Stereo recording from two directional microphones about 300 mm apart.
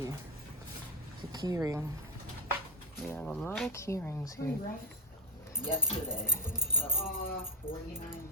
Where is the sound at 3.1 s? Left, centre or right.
Centre.